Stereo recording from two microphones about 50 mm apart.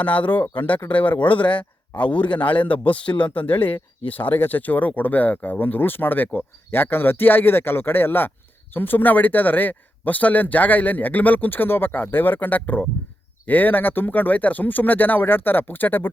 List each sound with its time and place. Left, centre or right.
0.0 s speech: left